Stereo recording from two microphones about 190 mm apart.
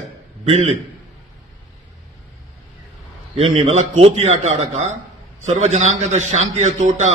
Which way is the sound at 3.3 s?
30° right (ahead or behind).